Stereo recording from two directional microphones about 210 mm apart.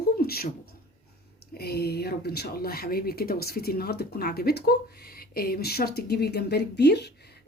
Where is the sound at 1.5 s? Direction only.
50° left (ahead or behind).